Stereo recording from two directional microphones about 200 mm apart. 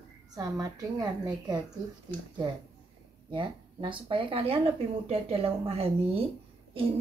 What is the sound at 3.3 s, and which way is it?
Speech, 25° right (ahead or behind).